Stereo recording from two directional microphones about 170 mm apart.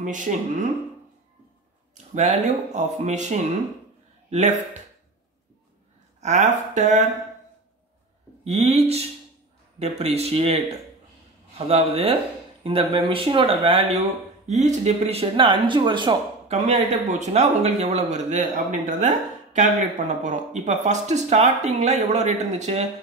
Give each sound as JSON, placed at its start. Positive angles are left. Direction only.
{"t": 0.0, "sound": "speech", "side_deg": -50}
{"t": 2.1, "sound": "a man's voice", "side_deg": -40}
{"t": 6.2, "sound": "speech", "side_deg": -45}
{"t": 8.5, "sound": "speech", "side_deg": -40}
{"t": 11.5, "sound": "speech", "side_deg": -35}